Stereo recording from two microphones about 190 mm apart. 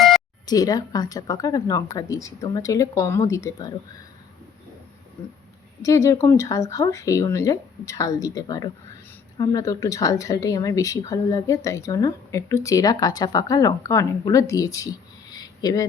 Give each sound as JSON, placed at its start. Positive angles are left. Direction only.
{"t": 0.4, "sound": "speech", "side_deg": 20}
{"t": 5.8, "sound": "speech", "side_deg": 15}